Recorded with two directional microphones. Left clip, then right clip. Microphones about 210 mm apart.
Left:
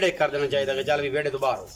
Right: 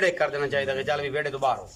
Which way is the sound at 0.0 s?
10° left (ahead or behind).